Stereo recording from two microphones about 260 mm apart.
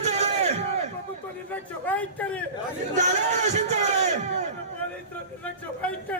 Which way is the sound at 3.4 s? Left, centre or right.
Right.